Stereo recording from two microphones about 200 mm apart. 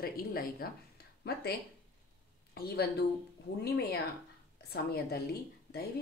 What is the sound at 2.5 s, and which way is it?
Speech, 55° left (ahead or behind).